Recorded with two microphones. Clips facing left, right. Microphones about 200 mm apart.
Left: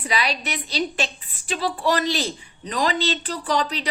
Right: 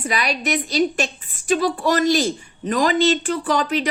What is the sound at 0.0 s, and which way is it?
A woman's voice, 45° right (ahead or behind).